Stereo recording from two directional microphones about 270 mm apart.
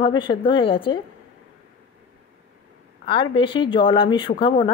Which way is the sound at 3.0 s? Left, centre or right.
Centre.